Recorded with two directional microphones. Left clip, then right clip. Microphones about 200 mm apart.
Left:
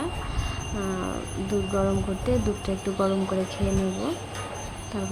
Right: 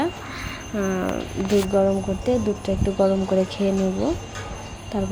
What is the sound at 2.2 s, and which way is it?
Speech, 10° right (ahead or behind).